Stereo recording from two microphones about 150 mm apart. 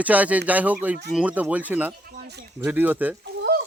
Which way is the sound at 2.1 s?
85° right.